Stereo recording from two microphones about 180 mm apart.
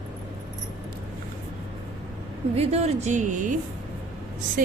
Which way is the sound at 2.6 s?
35° right (ahead or behind).